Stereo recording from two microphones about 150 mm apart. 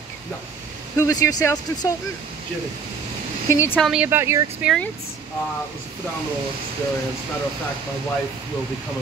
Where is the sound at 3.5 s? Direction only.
15° left (ahead or behind).